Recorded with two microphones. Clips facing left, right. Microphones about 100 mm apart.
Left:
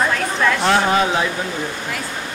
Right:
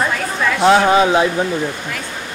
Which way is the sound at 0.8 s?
15° right (ahead or behind).